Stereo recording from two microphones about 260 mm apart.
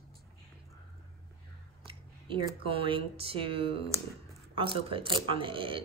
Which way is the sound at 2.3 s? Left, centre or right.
Centre.